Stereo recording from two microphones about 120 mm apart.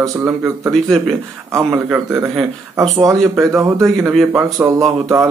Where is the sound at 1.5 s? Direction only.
20° right (ahead or behind).